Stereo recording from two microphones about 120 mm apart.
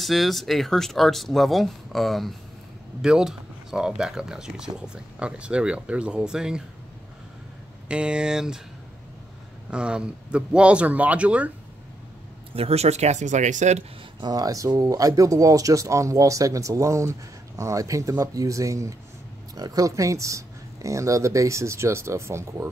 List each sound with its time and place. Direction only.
0.0 s speech: centre (ahead or behind)
7.9 s speech: 10° right (ahead or behind)
9.7 s speech: 10° right (ahead or behind)
12.5 s speech: 60° right (ahead or behind); by 13.8 s 80° right
14.2 s speech: 30° right (ahead or behind)